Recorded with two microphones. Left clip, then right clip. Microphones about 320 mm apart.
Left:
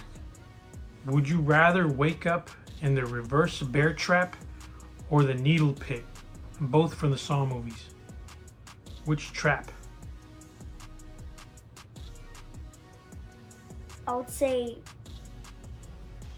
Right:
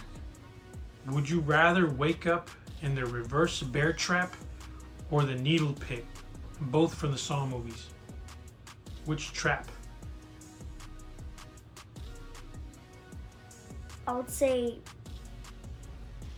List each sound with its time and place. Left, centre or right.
1.1 s speech: left
9.0 s speech: left
14.0 s a woman's voice: centre